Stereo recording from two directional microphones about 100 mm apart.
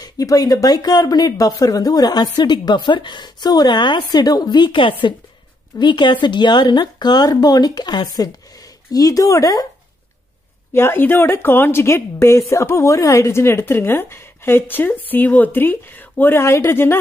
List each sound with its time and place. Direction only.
0.0 s speech: 40° left (ahead or behind)
8.9 s speech: 35° left (ahead or behind)
10.7 s speech: 25° left (ahead or behind)